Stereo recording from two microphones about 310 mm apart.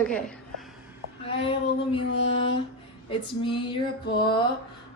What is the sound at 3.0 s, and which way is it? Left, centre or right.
A woman's voice, centre.